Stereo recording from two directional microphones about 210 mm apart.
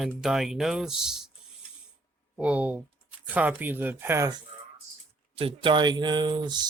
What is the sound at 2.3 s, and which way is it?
Speech, 5° right (ahead or behind).